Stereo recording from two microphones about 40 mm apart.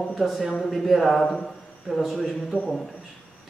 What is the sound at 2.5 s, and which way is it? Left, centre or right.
Speech, right.